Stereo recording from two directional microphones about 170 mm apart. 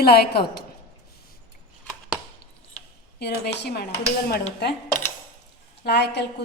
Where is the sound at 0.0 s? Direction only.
65° left (ahead or behind).